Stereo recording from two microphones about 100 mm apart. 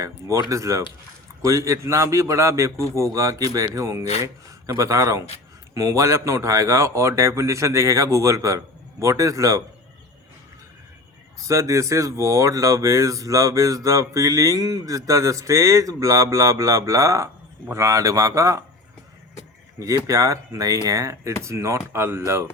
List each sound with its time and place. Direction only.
0.0 s speech: 30° right (ahead or behind)
11.4 s speech: 30° right (ahead or behind)
20.1 s speech: 30° right (ahead or behind)